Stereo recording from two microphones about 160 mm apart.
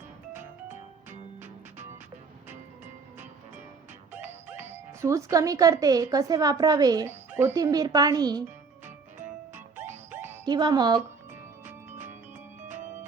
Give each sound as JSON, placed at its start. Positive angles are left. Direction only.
{"t": 1.4, "sound": "music", "side_deg": -15}
{"t": 4.4, "sound": "speech", "side_deg": -15}
{"t": 10.1, "sound": "music", "side_deg": -15}
{"t": 10.4, "sound": "speech", "side_deg": -25}
{"t": 11.6, "sound": "music", "side_deg": -15}